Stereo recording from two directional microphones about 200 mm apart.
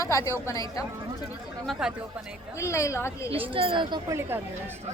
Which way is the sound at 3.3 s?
25° right (ahead or behind).